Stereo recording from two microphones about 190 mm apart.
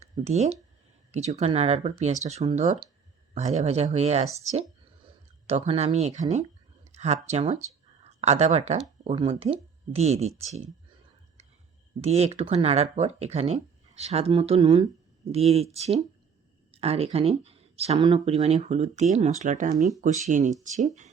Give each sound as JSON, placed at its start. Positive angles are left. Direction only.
{"t": 0.0, "sound": "speech", "side_deg": -35}
{"t": 11.9, "sound": "speech", "side_deg": -35}